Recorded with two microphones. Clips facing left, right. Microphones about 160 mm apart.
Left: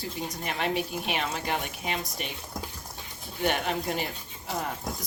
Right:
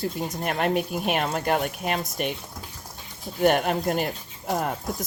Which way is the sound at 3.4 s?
50° right (ahead or behind).